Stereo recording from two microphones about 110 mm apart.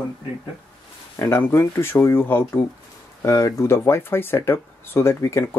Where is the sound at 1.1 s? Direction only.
20° left (ahead or behind).